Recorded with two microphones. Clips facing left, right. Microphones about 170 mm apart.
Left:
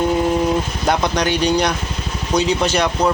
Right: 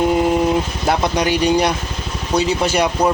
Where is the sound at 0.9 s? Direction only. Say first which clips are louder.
Even; 5° right (ahead or behind).